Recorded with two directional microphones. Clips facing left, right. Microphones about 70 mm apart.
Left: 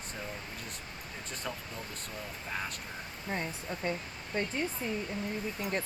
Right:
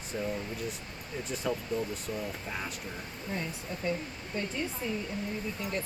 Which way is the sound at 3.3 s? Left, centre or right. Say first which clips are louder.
Left 1 dB; left.